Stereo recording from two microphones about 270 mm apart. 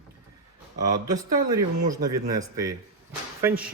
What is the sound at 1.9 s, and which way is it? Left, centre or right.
Speech, centre.